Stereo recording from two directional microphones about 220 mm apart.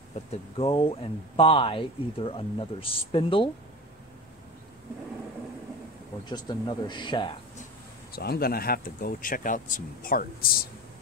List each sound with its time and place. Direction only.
0.1 s speech: 25° left (ahead or behind)
6.2 s speech: 20° left (ahead or behind)
8.1 s speech: 45° left (ahead or behind)